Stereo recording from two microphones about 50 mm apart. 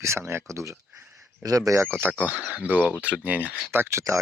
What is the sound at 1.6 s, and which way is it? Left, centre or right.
Speech, right.